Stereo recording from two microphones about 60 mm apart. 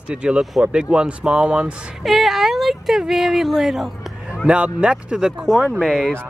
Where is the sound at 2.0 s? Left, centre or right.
Centre.